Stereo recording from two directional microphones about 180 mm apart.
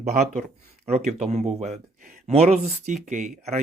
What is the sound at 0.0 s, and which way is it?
Speech, 40° right (ahead or behind).